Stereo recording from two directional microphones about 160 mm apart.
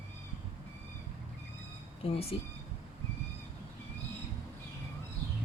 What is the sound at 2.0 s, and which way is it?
Speech, 35° left (ahead or behind).